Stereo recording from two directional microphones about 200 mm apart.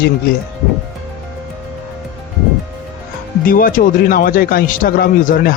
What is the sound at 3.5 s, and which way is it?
Speech, 45° left (ahead or behind).